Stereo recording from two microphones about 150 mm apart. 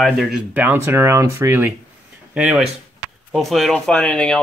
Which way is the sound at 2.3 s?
5° right (ahead or behind).